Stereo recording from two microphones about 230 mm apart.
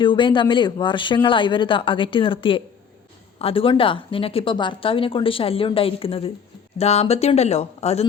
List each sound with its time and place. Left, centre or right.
0.0 s a woman's voice: left